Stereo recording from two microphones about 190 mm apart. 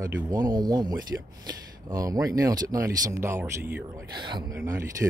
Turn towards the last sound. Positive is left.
turn(degrees=-15)  # may be behind; listen again after turning